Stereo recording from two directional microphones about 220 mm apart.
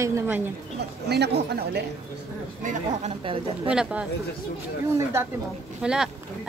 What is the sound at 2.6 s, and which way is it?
A woman's voice, 25° right (ahead or behind).